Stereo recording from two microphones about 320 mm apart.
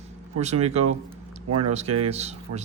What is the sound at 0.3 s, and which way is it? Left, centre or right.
Speech, centre.